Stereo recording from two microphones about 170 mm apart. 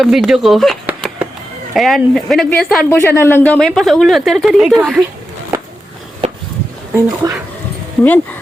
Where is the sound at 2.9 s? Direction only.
15° left (ahead or behind).